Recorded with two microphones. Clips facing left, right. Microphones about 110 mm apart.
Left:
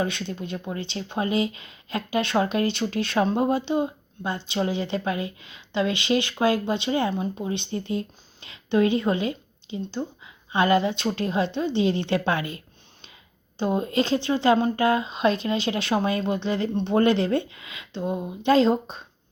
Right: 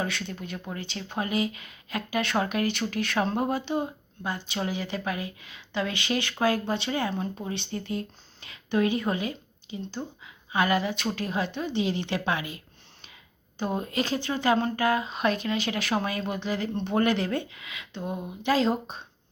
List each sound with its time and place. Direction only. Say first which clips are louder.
0.0 s speech: left 4 dB; 25° left (ahead or behind)
13.6 s speech: left 5 dB; 25° left (ahead or behind)